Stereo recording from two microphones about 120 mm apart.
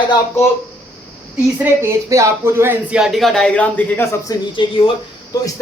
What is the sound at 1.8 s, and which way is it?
Speech, 25° right (ahead or behind).